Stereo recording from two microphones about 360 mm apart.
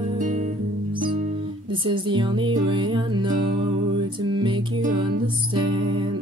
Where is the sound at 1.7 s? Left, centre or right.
Centre.